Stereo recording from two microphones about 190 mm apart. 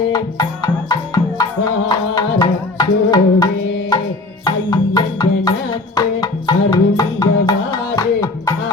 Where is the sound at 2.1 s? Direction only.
20° left (ahead or behind).